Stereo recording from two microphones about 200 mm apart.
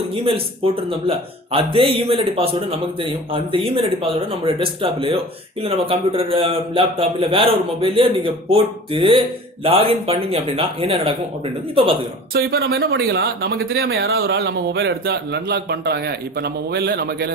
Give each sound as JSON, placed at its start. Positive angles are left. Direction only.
{"t": 0.3, "sound": "speech", "side_deg": -25}
{"t": 12.3, "sound": "speech", "side_deg": -50}